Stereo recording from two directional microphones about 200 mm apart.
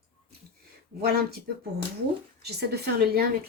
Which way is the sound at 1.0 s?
50° right (ahead or behind).